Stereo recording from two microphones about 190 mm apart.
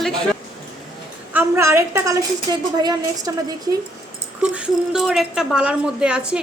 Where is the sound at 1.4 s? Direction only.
15° right (ahead or behind).